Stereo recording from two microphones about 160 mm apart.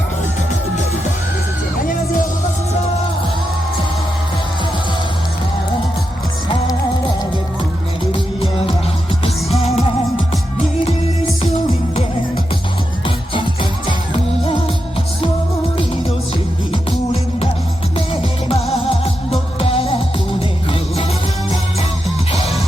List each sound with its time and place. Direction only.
8.1 s music: 35° left (ahead or behind)
13.1 s music: 30° left (ahead or behind)
17.9 s music: 35° left (ahead or behind)
22.3 s music: 40° left (ahead or behind)